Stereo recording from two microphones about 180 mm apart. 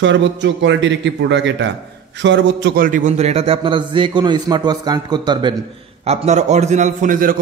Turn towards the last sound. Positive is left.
turn(degrees=-50)  # may be behind; listen again after turning